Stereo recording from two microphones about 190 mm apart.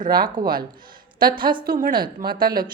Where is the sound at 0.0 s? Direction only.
50° right (ahead or behind).